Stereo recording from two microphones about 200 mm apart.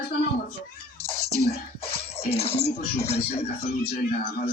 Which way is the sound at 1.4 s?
30° left (ahead or behind).